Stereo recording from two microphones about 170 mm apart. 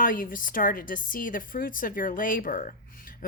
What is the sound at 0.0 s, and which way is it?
Speech, 55° left (ahead or behind).